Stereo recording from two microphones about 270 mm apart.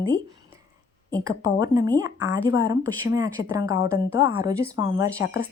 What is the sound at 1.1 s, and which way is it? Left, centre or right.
Speech, centre.